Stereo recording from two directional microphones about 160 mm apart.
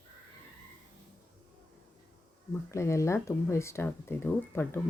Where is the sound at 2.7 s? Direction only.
20° left (ahead or behind).